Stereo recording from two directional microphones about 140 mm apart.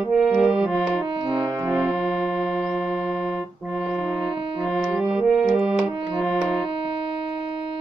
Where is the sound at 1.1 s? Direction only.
30° right (ahead or behind).